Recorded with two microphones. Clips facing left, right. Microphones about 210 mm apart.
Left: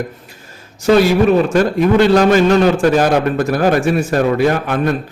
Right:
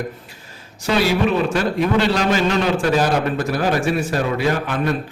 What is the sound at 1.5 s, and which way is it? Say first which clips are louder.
A man's voice: left 6 dB; 45° left (ahead or behind).